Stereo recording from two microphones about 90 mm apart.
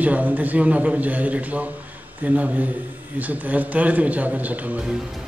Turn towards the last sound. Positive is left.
turn(degrees=-15)  # may be behind; listen again after turning